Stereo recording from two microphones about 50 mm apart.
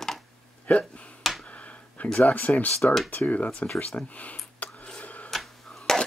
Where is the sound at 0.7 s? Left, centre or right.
Left.